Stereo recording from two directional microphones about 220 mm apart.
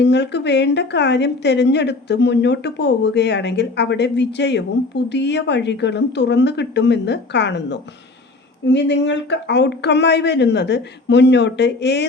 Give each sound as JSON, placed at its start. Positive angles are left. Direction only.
{"t": 0.0, "sound": "a woman's voice", "side_deg": 50}